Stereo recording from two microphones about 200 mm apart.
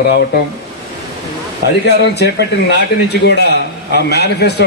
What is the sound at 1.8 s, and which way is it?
A man's voice, 55° left (ahead or behind).